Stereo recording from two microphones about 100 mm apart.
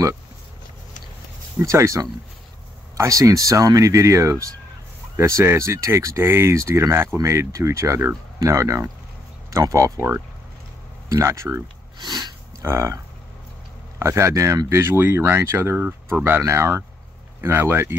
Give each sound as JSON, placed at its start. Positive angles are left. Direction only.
{"t": 1.6, "sound": "speech", "side_deg": -30}
{"t": 12.0, "sound": "a sound", "side_deg": -45}
{"t": 12.6, "sound": "speech", "side_deg": -30}